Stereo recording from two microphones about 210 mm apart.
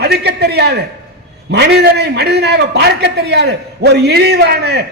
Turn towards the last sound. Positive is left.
turn(degrees=-50)  # may be behind; listen again after turning